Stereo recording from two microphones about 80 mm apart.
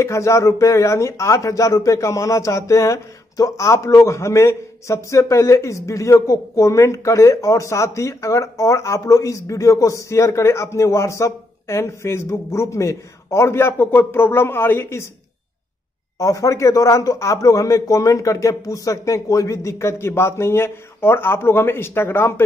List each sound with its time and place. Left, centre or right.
0.0 s speech: left
16.2 s speech: left